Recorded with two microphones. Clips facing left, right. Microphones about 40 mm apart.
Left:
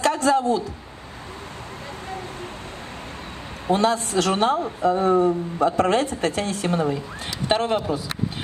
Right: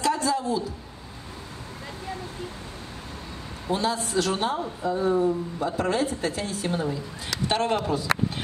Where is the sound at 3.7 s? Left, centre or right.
Left.